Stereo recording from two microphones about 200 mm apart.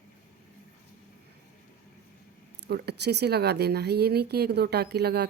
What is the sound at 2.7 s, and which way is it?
Speech, 55° right (ahead or behind).